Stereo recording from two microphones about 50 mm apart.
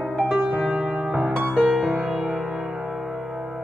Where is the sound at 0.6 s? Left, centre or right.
Right.